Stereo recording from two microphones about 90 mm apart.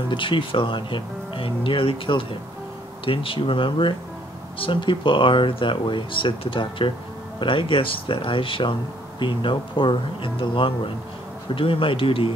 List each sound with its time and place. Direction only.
0.1 s speech: 70° left (ahead or behind)